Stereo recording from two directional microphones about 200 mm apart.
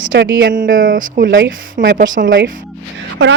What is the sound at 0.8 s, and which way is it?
Speech, 45° right (ahead or behind).